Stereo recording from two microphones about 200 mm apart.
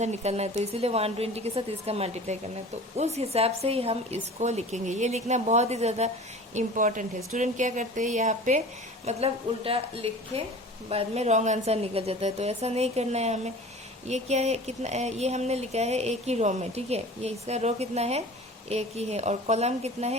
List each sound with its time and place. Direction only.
0.0 s a woman's voice: 35° right (ahead or behind)